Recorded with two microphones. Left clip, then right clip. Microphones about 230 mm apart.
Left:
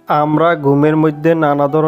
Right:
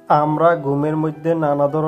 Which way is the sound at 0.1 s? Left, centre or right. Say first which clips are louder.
Left 2 dB; left.